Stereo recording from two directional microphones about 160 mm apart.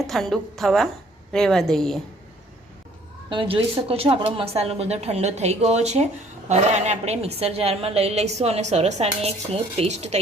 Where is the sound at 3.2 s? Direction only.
35° right (ahead or behind).